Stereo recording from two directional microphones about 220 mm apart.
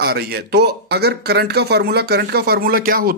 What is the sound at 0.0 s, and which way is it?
Speech, 45° right (ahead or behind).